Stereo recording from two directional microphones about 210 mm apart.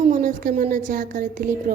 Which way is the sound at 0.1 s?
40° right (ahead or behind).